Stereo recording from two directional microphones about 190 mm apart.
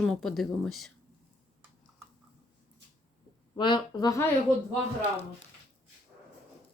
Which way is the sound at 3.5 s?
25° left (ahead or behind).